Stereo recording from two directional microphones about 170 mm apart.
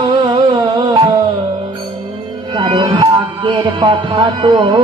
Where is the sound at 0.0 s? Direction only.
30° right (ahead or behind).